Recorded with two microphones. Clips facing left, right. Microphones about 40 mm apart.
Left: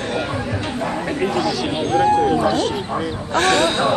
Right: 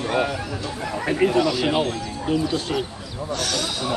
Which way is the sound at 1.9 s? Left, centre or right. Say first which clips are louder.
Left 10 dB; left.